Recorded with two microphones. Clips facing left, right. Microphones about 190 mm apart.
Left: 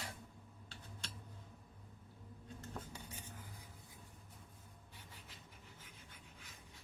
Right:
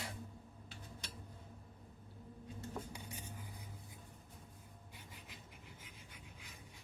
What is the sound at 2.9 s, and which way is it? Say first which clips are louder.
Whispering: right 2 dB; 15° right (ahead or behind).